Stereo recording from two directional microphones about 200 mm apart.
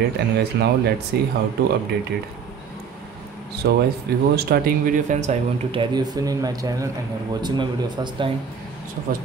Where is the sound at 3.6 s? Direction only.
55° right (ahead or behind); by 8.3 s 20° right (ahead or behind).